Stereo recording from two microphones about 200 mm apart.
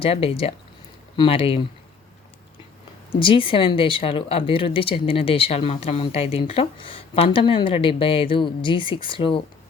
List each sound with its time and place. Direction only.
0.0 s speech: 30° left (ahead or behind)
3.1 s speech: 25° left (ahead or behind)